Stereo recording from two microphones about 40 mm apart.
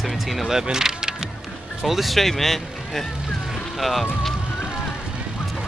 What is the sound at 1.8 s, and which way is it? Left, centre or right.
Speech, centre.